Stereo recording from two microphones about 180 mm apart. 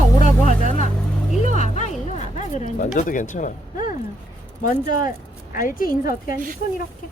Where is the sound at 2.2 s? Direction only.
40° left (ahead or behind).